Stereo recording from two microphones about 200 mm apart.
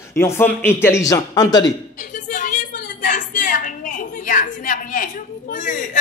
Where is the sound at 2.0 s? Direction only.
40° left (ahead or behind).